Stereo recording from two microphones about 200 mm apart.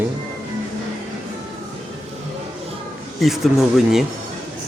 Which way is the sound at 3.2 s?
Centre (ahead or behind).